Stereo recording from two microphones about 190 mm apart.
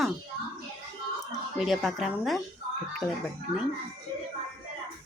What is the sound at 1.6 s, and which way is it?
Speech, centre (ahead or behind).